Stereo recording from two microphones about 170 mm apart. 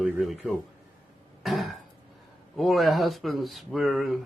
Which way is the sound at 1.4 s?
Centre (ahead or behind).